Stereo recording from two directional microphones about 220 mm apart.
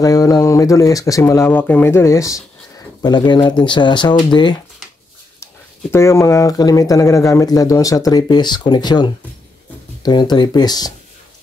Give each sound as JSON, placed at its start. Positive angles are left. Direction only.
{"t": 0.0, "sound": "speech", "side_deg": 15}